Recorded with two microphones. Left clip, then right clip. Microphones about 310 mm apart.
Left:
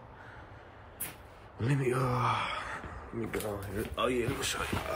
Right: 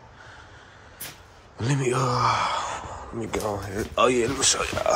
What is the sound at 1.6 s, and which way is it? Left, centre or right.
Speech, centre.